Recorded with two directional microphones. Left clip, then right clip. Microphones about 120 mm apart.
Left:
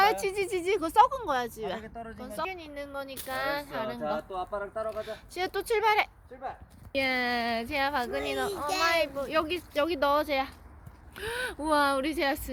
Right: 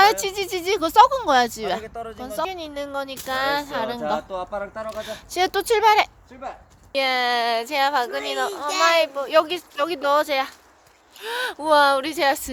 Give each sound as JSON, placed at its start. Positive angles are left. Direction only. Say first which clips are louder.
{"t": 0.0, "sound": "speech", "louder": "right 8 dB", "side_deg": -25}
{"t": 1.2, "sound": "speech", "louder": "right 11 dB", "side_deg": -65}
{"t": 2.2, "sound": "speech", "louder": "right 8 dB", "side_deg": -35}
{"t": 8.6, "sound": "speech", "louder": "right 8 dB", "side_deg": -10}
{"t": 8.9, "sound": "speech", "louder": "right 9 dB", "side_deg": -40}